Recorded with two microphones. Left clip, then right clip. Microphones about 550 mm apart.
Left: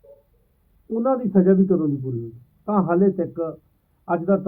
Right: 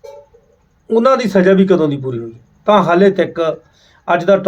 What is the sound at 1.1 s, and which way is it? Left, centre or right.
Speech, right.